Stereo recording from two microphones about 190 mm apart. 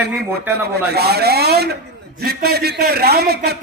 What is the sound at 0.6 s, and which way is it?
A man's voice, 60° right (ahead or behind).